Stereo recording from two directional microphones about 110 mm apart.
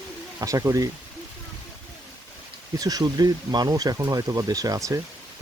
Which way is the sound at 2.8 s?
35° right (ahead or behind).